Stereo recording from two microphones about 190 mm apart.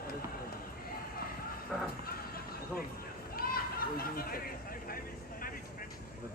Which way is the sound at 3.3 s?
50° left (ahead or behind).